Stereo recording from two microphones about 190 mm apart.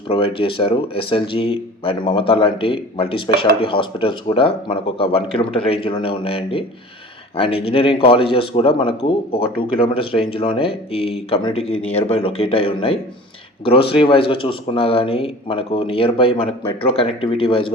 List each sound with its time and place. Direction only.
0.1 s speech: 30° left (ahead or behind)